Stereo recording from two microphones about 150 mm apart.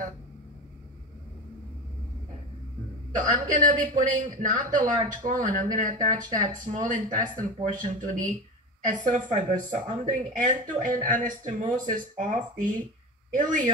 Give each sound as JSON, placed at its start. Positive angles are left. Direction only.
{"t": 3.2, "sound": "a man's voice", "side_deg": -60}